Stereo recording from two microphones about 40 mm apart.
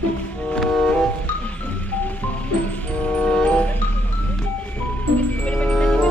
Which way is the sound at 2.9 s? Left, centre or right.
Left.